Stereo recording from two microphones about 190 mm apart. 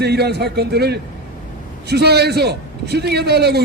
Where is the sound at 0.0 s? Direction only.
60° right (ahead or behind).